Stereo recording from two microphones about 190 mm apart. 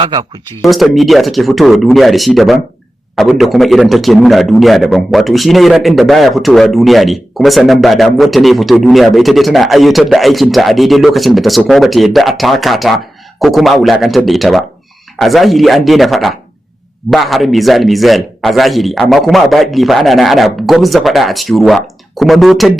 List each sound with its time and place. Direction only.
0.0 s speech: 25° right (ahead or behind)
0.6 s a man's voice: centre (ahead or behind)